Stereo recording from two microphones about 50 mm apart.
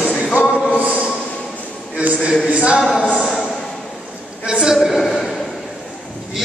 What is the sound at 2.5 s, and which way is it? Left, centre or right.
Speech, right.